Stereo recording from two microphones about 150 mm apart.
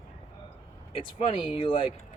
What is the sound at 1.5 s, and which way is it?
Speech, 35° left (ahead or behind).